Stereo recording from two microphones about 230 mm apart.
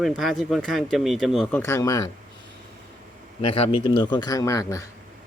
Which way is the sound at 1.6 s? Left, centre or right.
Centre.